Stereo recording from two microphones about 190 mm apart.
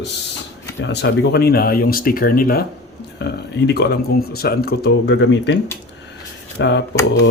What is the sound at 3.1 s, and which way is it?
Speech, 60° left (ahead or behind).